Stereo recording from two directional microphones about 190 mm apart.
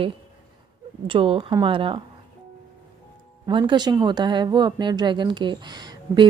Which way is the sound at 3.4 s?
25° right (ahead or behind).